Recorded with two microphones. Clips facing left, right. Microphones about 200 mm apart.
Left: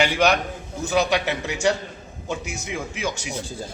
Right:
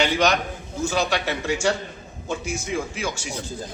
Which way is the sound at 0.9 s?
15° left (ahead or behind).